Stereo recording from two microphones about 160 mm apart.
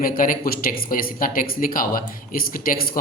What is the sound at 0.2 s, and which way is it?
Speech, 65° left (ahead or behind).